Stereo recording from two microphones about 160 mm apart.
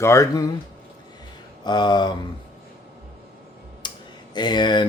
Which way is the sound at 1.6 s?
25° left (ahead or behind).